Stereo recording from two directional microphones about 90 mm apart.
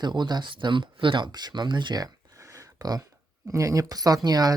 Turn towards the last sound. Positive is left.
turn(degrees=-45)  # may be behind; listen again after turning